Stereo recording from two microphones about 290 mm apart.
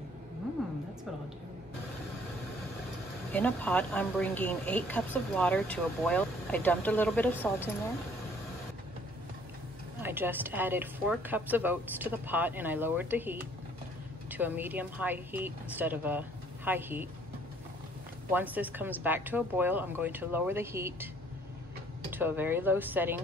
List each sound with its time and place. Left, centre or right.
3.3 s speech: centre
10.0 s speech: centre
18.3 s speech: centre
22.1 s speech: centre